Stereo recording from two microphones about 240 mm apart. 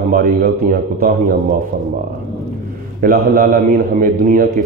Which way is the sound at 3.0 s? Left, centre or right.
Right.